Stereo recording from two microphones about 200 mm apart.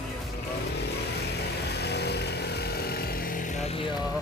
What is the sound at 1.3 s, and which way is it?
Vehicle, 55° left (ahead or behind).